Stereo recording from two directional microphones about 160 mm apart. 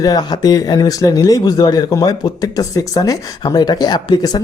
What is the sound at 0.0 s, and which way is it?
Speech, 25° left (ahead or behind).